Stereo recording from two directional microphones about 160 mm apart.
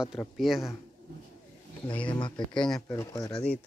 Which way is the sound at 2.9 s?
20° left (ahead or behind).